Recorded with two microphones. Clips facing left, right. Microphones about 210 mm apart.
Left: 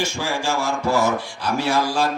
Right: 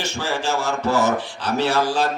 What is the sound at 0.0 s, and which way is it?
Music, 10° left (ahead or behind).